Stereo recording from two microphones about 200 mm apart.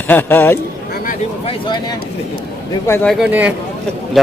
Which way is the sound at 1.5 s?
25° left (ahead or behind).